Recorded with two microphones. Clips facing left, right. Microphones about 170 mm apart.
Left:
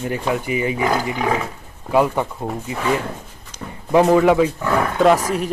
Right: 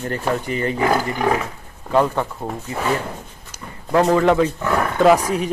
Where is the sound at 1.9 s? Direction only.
10° left (ahead or behind).